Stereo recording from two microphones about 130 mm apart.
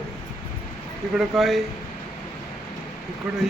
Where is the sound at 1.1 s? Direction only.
Centre (ahead or behind).